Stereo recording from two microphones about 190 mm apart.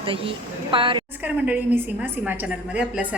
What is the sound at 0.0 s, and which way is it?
A woman's voice, 30° right (ahead or behind).